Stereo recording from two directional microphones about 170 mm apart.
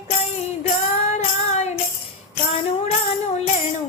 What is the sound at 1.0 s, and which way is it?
Music, 45° left (ahead or behind).